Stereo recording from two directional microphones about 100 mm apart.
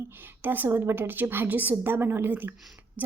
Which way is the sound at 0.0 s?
20° right (ahead or behind).